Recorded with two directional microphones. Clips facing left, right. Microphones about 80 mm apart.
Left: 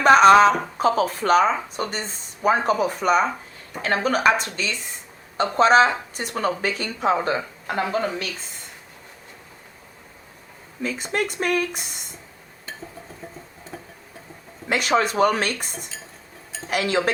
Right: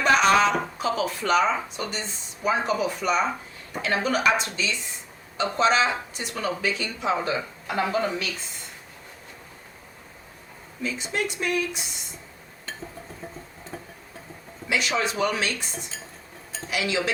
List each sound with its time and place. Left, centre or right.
0.0 s speech: left
10.8 s speech: left
14.7 s speech: left